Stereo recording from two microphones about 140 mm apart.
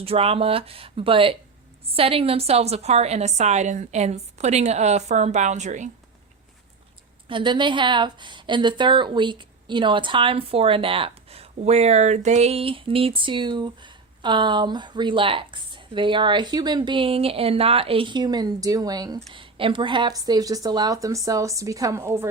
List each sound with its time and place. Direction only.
0.0 s a woman's voice: 45° right (ahead or behind)
7.3 s speech: 35° right (ahead or behind)
19.3 s a woman's voice: 40° right (ahead or behind); by 22.3 s 20° right (ahead or behind)